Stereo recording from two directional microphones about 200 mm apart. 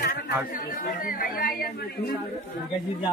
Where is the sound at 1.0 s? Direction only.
45° left (ahead or behind).